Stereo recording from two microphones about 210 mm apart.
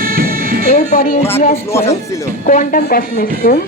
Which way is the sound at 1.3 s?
30° left (ahead or behind).